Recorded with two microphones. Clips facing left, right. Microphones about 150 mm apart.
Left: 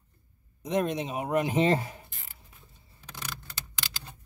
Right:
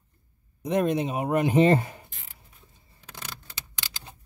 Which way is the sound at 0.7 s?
55° right (ahead or behind).